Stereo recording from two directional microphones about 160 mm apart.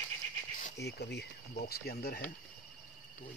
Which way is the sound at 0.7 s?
90° left.